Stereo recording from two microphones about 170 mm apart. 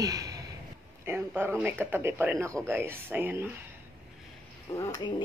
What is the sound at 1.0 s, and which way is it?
A man's voice, 15° right (ahead or behind).